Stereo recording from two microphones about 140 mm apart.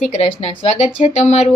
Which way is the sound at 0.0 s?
50° left (ahead or behind).